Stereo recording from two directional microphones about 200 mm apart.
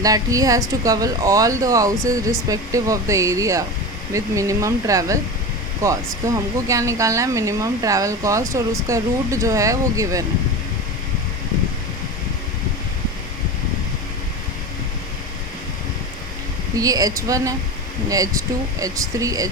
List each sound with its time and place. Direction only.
0.0 s speech: 15° right (ahead or behind)
16.7 s speech: 15° right (ahead or behind)